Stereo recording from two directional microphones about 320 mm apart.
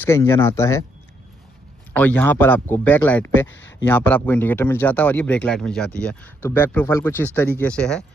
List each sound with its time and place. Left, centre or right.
0.0 s speech: centre
2.0 s speech: centre
3.4 s speech: left
3.8 s speech: centre